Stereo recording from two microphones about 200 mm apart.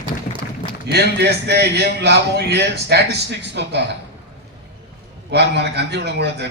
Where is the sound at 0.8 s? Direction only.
55° right (ahead or behind).